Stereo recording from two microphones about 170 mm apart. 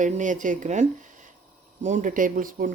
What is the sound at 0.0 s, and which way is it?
Speech, 50° right (ahead or behind).